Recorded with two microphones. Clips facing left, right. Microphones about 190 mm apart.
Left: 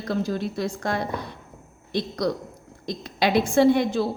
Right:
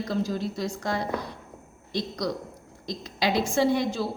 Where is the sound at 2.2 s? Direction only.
60° left (ahead or behind).